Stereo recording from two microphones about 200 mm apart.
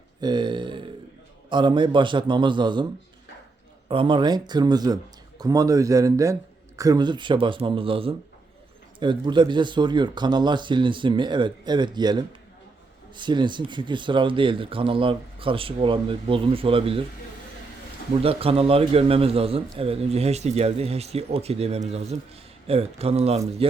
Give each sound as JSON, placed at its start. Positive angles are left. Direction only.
{"t": 0.2, "sound": "a man's voice", "side_deg": -20}
{"t": 3.8, "sound": "a man's voice", "side_deg": -25}
{"t": 18.2, "sound": "a man's voice", "side_deg": -30}